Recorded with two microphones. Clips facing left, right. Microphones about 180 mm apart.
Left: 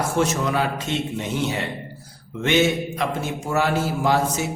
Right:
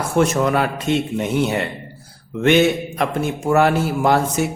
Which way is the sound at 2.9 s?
55° right (ahead or behind).